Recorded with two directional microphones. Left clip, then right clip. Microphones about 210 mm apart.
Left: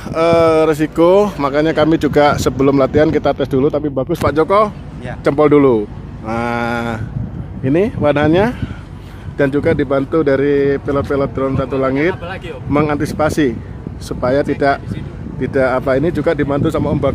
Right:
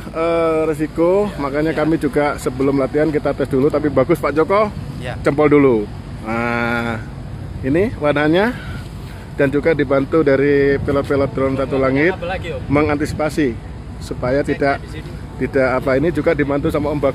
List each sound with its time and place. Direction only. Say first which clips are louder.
0.1 s speech: left 5 dB; 15° left (ahead or behind)
3.9 s speech: right 4 dB; 20° right (ahead or behind)
4.2 s speech: left 3 dB; centre (ahead or behind)